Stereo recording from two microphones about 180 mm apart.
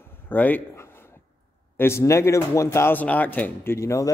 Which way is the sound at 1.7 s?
15° left (ahead or behind).